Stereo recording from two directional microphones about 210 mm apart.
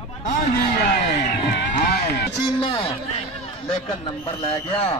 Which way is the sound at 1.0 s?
35° left (ahead or behind).